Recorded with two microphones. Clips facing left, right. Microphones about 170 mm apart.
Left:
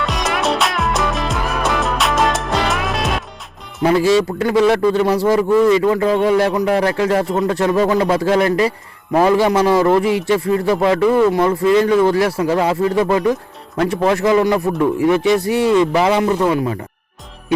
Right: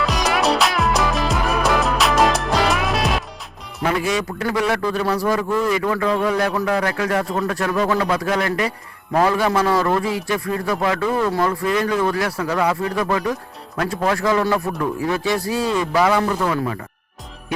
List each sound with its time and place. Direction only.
0.0 s music: centre (ahead or behind)
3.8 s speech: 30° left (ahead or behind)